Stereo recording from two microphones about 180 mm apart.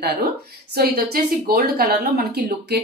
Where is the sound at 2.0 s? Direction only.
45° right (ahead or behind).